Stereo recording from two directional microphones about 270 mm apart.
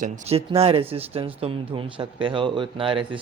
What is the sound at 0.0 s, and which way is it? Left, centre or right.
Speech, right.